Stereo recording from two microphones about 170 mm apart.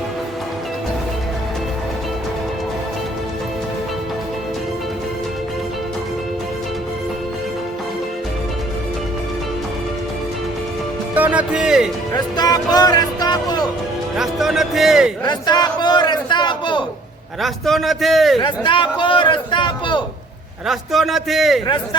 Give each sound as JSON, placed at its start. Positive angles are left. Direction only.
{"t": 11.1, "sound": "music", "side_deg": -10}
{"t": 12.1, "sound": "speech", "side_deg": 25}
{"t": 14.2, "sound": "a man's voice", "side_deg": 0}
{"t": 15.2, "sound": "a sound", "side_deg": 25}
{"t": 17.4, "sound": "a man's voice", "side_deg": 0}
{"t": 18.3, "sound": "a man's voice", "side_deg": 30}
{"t": 20.7, "sound": "a man's voice", "side_deg": 0}